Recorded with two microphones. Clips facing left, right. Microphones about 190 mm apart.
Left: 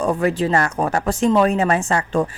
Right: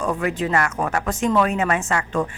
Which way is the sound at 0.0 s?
35° left (ahead or behind).